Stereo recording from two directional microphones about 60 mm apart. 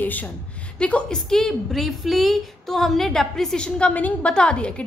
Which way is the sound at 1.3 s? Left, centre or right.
Centre.